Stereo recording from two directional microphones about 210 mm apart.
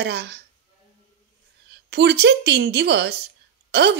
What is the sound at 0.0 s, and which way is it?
Speech, 55° right (ahead or behind).